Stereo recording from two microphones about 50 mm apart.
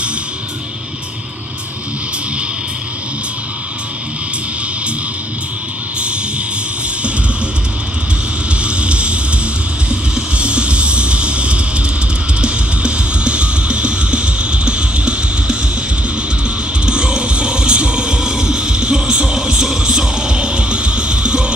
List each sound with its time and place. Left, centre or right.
8.6 s music: right
16.8 s music: centre